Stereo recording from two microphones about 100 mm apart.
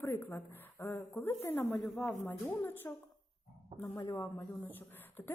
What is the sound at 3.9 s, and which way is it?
Speech, 35° left (ahead or behind).